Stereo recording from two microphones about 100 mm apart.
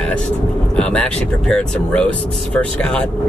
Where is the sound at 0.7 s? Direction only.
10° left (ahead or behind).